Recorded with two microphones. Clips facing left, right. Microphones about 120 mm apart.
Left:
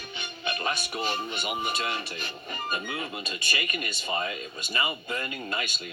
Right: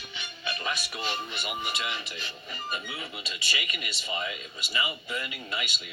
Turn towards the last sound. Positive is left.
turn(degrees=50)  # may be behind; listen again after turning